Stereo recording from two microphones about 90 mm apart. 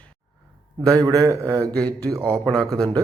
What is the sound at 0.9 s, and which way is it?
Speech, 40° right (ahead or behind).